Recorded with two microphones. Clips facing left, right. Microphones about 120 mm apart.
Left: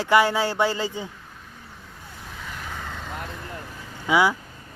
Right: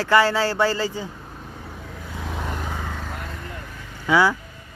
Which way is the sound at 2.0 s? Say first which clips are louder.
Right 9 dB; 90° right.